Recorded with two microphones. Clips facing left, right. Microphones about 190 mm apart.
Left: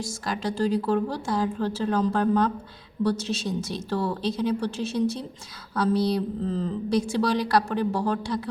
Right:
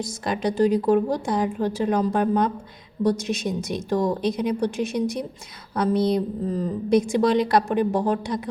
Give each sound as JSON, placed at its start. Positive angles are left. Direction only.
{"t": 0.0, "sound": "a woman's voice", "side_deg": -20}